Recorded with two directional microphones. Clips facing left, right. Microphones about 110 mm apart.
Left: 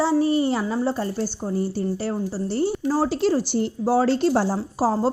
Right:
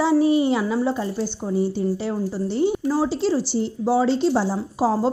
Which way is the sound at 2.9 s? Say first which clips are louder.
Even; 50° left (ahead or behind).